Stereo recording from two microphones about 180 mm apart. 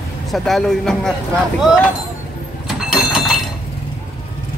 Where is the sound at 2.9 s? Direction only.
Centre (ahead or behind).